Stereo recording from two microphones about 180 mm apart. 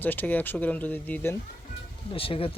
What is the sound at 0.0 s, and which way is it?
Speech, 10° left (ahead or behind).